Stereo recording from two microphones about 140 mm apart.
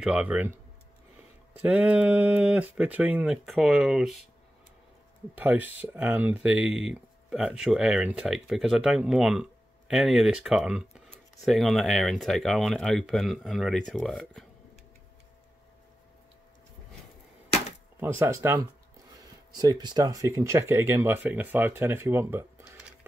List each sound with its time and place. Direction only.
0.0 s speech: 10° right (ahead or behind)
1.5 s speech: 10° right (ahead or behind)
5.3 s speech: 10° right (ahead or behind)
17.9 s speech: 20° right (ahead or behind)
19.6 s speech: 30° right (ahead or behind)